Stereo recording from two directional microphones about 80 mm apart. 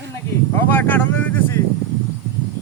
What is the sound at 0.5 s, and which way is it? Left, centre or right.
Speech, left.